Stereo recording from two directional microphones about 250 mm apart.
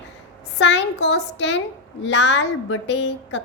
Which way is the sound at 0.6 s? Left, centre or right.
Left.